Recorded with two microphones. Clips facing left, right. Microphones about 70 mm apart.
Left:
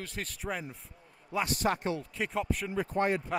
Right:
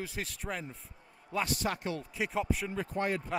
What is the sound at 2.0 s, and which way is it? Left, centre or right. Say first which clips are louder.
Speech: even; centre.